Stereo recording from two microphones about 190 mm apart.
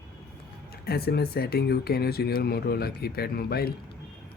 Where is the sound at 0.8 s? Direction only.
55° left (ahead or behind).